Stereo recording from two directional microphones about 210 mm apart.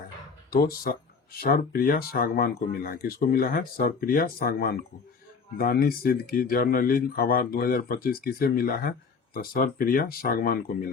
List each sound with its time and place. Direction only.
0.5 s speech: 45° left (ahead or behind)